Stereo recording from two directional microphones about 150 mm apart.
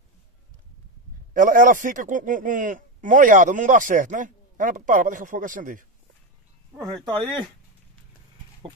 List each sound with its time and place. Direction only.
1.3 s speech: 65° right (ahead or behind)
6.7 s speech: centre (ahead or behind)